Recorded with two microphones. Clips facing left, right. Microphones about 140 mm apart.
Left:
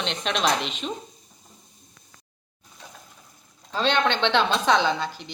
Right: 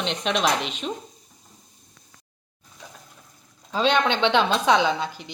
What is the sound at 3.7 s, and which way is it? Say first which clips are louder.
A woman's voice: right 2 dB; 10° right (ahead or behind).